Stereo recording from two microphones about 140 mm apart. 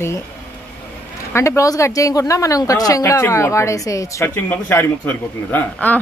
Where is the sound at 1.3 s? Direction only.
20° left (ahead or behind).